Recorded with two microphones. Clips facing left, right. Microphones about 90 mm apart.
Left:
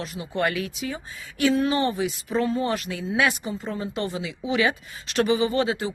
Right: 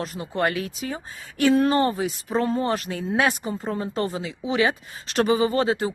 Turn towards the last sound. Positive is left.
turn(degrees=-35)  # may be behind; listen again after turning